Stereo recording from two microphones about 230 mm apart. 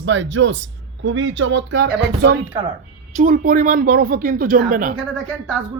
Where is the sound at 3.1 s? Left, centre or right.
Right.